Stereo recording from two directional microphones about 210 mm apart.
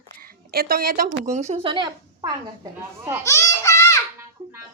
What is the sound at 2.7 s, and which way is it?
Speech, 10° right (ahead or behind).